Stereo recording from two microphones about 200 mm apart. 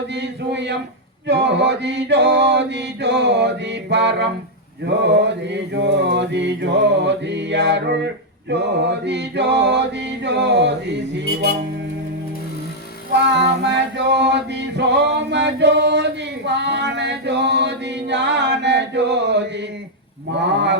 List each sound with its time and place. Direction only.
0.1 s a sound: 60° right (ahead or behind)
1.3 s mantra: 60° right (ahead or behind)
13.3 s male singing: 60° right (ahead or behind)
20.3 s mantra: 60° right (ahead or behind)